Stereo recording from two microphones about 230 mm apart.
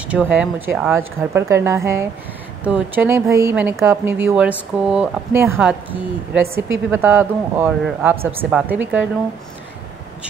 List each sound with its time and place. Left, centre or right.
0.1 s speech: centre